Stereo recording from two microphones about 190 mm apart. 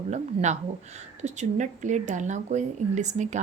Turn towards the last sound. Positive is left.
turn(degrees=-40)  # may be behind; listen again after turning